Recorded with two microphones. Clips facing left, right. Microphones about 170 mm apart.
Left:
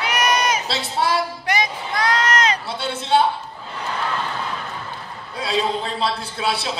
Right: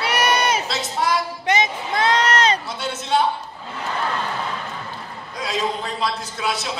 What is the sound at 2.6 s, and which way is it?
Speech, 30° left (ahead or behind).